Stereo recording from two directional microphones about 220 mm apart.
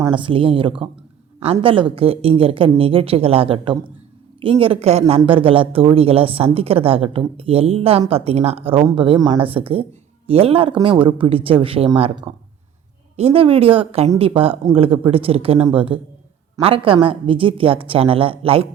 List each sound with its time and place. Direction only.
0.0 s speech: 20° right (ahead or behind)